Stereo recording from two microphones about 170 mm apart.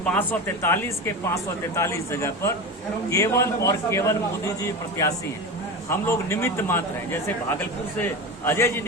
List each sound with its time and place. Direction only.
0.0 s speech: 10° left (ahead or behind)
6.1 s speech: 15° left (ahead or behind)